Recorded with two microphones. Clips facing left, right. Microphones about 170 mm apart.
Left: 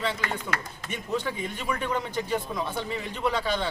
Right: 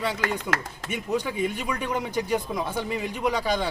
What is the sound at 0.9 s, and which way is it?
Speech, 10° right (ahead or behind).